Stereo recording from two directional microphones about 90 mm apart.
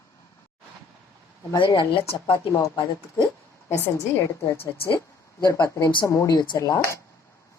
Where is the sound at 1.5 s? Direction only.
65° left (ahead or behind); by 2.5 s 90° left.